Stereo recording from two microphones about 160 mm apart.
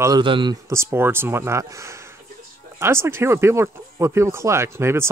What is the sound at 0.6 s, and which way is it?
Speech, 15° right (ahead or behind).